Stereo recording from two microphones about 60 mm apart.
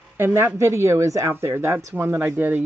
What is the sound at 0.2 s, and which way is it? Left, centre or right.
Speech, right.